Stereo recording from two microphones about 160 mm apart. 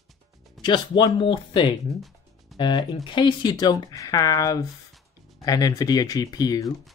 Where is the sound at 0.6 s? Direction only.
25° left (ahead or behind).